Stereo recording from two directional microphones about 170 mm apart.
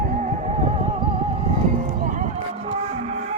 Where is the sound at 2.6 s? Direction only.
35° right (ahead or behind).